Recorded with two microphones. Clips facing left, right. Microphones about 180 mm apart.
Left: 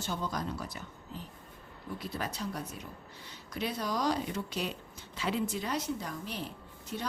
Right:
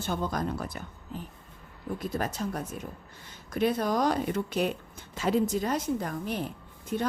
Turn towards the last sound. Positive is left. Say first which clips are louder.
# right 8 dB
turn(degrees=-50)  # may be behind; listen again after turning